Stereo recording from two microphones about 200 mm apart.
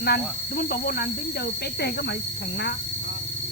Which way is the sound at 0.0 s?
50° left (ahead or behind).